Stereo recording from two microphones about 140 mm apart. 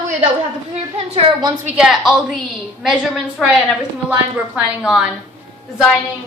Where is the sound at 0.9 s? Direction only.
45° right (ahead or behind).